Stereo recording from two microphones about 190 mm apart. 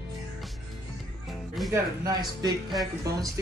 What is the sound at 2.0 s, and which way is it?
Speech, 20° right (ahead or behind).